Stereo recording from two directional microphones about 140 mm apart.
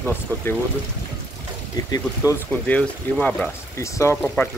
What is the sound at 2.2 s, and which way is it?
Speech, 25° left (ahead or behind).